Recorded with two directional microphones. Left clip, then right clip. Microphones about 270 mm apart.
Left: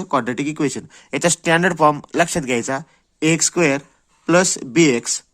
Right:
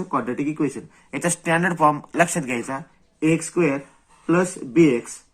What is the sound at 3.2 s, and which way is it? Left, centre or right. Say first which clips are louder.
Speech: left 3 dB; left.